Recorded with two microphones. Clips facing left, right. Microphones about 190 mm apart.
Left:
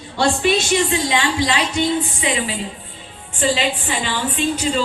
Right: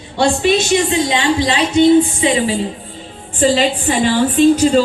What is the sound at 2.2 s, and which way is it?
A woman's voice, 30° right (ahead or behind).